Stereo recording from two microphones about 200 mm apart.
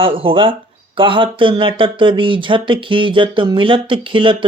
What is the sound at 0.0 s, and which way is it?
Speech, 25° right (ahead or behind).